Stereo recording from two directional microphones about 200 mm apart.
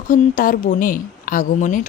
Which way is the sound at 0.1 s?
45° left (ahead or behind).